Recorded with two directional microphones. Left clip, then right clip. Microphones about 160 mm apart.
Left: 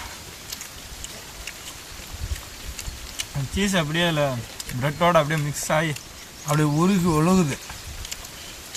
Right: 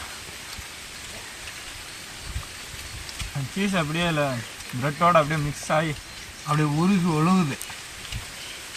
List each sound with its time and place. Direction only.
3.7 s speech: 30° left (ahead or behind)
6.5 s speech: 35° left (ahead or behind)